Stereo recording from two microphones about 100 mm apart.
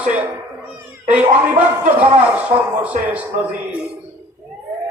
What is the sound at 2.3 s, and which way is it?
Speech, 15° right (ahead or behind).